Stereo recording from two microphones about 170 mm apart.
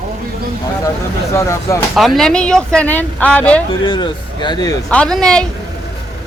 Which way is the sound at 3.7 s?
30° left (ahead or behind).